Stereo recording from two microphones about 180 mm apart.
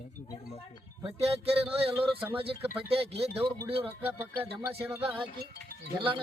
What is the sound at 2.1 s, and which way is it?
Speech, 10° right (ahead or behind).